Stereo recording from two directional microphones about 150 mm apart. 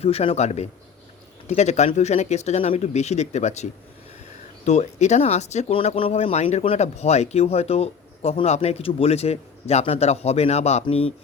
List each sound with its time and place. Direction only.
0.0 s speech: 40° left (ahead or behind)